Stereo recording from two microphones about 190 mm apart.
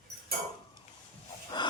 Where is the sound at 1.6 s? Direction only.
25° left (ahead or behind).